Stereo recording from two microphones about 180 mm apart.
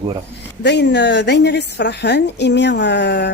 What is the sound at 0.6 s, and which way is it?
Speech, 70° left (ahead or behind).